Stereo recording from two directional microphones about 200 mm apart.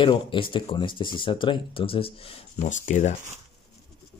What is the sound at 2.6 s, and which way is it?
Speech, 40° left (ahead or behind).